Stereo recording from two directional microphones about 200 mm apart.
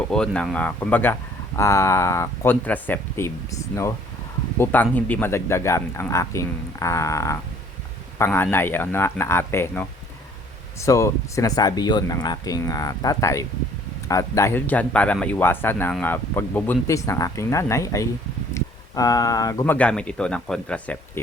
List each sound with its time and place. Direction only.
0.1 s speech: 5° left (ahead or behind)